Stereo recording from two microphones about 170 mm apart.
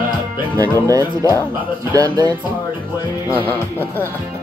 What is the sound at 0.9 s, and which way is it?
Music, 20° right (ahead or behind).